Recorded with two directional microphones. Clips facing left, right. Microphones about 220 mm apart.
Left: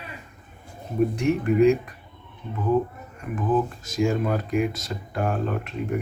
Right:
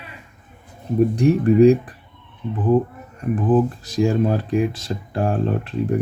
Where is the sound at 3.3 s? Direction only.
35° right (ahead or behind).